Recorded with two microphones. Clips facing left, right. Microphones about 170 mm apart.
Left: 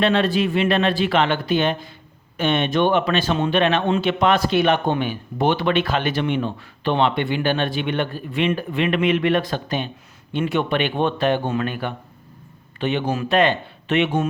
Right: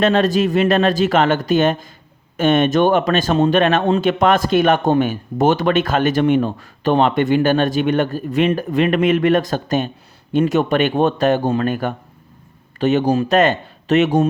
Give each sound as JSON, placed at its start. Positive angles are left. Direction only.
{"t": 0.0, "sound": "speech", "side_deg": -40}